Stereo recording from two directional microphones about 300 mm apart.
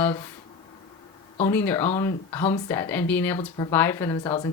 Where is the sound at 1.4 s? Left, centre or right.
Centre.